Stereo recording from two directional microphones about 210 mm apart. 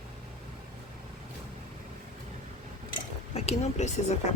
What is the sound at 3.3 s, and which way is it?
Speech, 30° left (ahead or behind).